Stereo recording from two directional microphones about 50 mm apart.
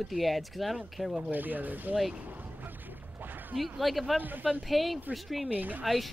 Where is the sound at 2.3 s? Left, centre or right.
Right.